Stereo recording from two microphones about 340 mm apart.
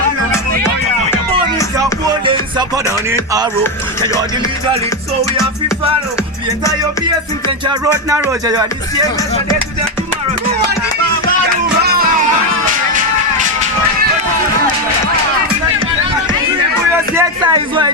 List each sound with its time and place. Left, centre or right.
2.2 s music: centre
7.7 s speech: centre
11.8 s music: right
17.2 s speech: centre